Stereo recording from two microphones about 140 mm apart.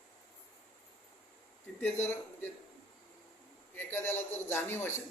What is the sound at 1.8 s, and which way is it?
Speech, 15° left (ahead or behind).